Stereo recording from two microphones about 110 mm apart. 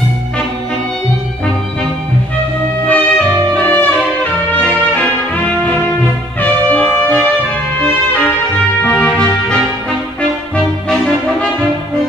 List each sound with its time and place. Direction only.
2.9 s music: 15° left (ahead or behind)
6.4 s music: 15° left (ahead or behind)